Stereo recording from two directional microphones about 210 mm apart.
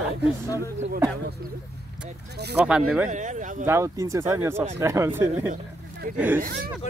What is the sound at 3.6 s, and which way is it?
Speech, 10° right (ahead or behind).